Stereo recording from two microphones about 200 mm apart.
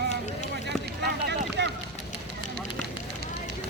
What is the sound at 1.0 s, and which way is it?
Boat, 55° right (ahead or behind).